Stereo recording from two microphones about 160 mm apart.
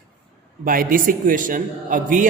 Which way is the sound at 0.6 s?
60° right (ahead or behind).